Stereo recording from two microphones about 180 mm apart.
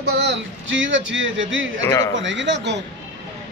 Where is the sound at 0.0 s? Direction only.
70° right (ahead or behind); by 1.7 s 90° right.